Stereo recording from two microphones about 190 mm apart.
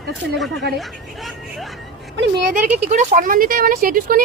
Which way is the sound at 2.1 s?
60° right (ahead or behind).